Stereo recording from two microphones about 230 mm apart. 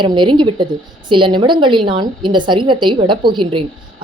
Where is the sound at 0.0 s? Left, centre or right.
Centre.